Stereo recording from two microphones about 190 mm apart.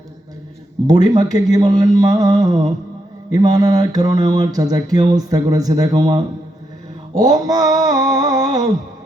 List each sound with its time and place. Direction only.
0.9 s speech: 20° right (ahead or behind)